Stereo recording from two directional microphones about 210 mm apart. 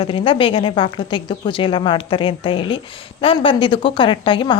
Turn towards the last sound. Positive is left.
turn(degrees=25)  # may be behind; listen again after turning